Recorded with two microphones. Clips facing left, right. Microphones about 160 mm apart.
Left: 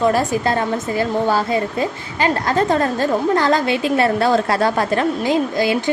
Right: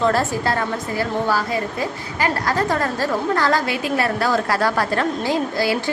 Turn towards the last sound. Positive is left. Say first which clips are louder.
# left 3 dB
turn(degrees=20)  # may be behind; listen again after turning